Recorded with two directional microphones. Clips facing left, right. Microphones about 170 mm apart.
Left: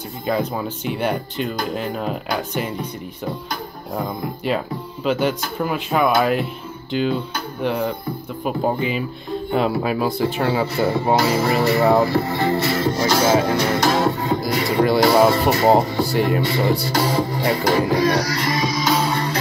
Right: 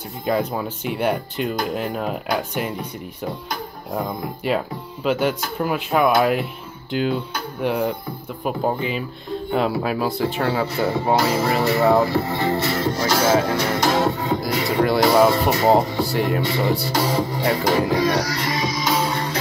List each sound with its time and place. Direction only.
0.3 s speech: 5° right (ahead or behind)
3.9 s speech: centre (ahead or behind)
12.1 s speech: 20° right (ahead or behind)
13.2 s speech: 10° left (ahead or behind)
13.7 s music: 20° right (ahead or behind)
14.4 s speech: centre (ahead or behind)
18.1 s music: 20° right (ahead or behind)